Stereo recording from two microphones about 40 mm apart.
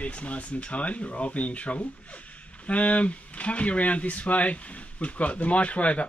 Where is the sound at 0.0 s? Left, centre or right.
Left.